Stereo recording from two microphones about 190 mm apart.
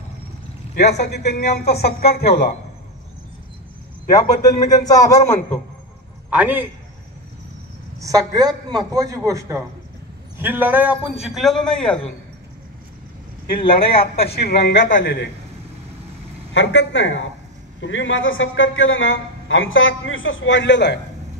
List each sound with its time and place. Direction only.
0.7 s speech: 60° left (ahead or behind)
4.1 s a man's voice: 20° left (ahead or behind)
6.3 s a man's voice: 10° right (ahead or behind)
8.0 s a man's voice: 20° right (ahead or behind); by 12.1 s 5° left (ahead or behind)
13.9 s speech: 55° left (ahead or behind)
16.5 s a man's voice: 85° left